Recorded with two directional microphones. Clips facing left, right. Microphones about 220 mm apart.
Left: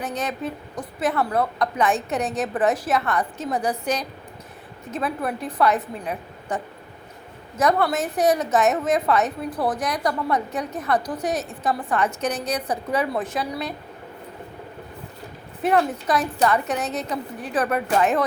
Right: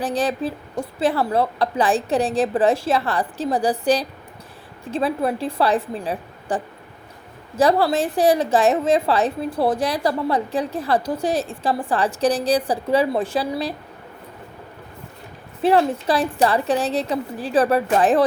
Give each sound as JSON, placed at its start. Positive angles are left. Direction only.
{"t": 0.0, "sound": "a woman's voice", "side_deg": -30}
{"t": 15.6, "sound": "a woman's voice", "side_deg": -30}